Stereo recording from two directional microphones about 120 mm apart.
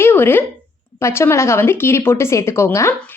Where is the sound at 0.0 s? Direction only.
20° left (ahead or behind).